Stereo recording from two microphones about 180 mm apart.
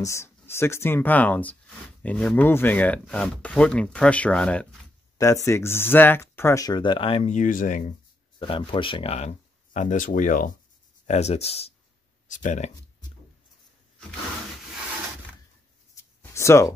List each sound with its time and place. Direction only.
0.0 s speech: 15° left (ahead or behind)
5.1 s speech: 15° left (ahead or behind); by 7.9 s 45° left (ahead or behind)
8.4 s speech: 30° left (ahead or behind)
9.8 s speech: 45° left (ahead or behind)
11.1 s speech: 35° left (ahead or behind)
12.3 s speech: 45° left (ahead or behind)
15.9 s a sound: 15° left (ahead or behind)